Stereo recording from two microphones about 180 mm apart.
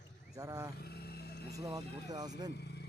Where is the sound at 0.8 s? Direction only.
60° left (ahead or behind).